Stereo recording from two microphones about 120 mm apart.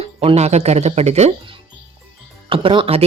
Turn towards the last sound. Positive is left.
turn(degrees=-50)  # may be behind; listen again after turning